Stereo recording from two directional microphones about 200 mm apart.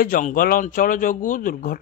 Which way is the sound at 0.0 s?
45° left (ahead or behind).